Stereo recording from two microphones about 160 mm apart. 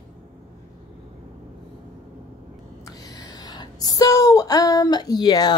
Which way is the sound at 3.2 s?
25° left (ahead or behind).